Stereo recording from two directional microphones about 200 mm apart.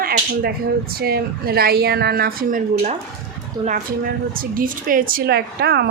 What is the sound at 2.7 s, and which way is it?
Speech, 35° right (ahead or behind).